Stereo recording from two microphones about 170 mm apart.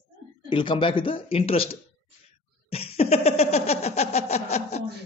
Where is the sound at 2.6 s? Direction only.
35° left (ahead or behind).